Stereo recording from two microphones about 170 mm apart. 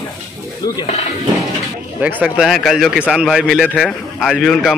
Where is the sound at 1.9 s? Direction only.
10° right (ahead or behind).